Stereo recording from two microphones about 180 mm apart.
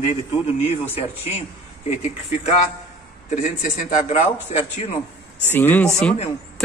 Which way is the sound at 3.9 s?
40° left (ahead or behind).